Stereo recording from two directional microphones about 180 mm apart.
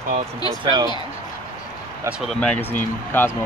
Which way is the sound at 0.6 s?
20° right (ahead or behind).